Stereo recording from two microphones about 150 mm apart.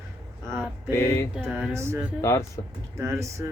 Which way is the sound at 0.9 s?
20° left (ahead or behind).